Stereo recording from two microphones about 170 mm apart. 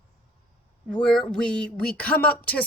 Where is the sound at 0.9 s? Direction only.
5° left (ahead or behind).